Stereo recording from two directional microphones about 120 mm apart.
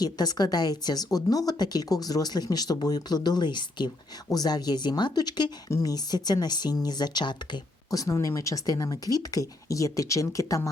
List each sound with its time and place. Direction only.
0.0 s speech: 35° left (ahead or behind)